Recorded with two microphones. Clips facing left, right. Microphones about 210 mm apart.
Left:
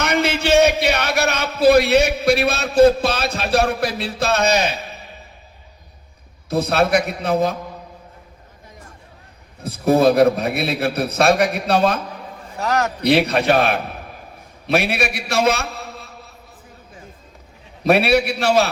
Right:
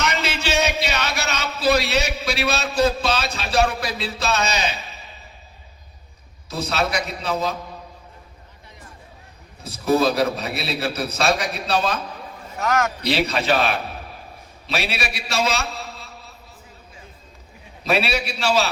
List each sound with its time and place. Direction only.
0.0 s a man's voice: 55° left (ahead or behind)
6.5 s a man's voice: 55° left (ahead or behind)
9.6 s a man's voice: 55° left (ahead or behind)
12.5 s a man's voice: 35° left (ahead or behind)
13.0 s a man's voice: 55° left (ahead or behind)
17.8 s a man's voice: 55° left (ahead or behind)